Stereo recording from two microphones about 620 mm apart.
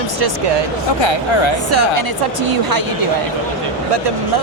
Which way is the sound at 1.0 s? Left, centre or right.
Left.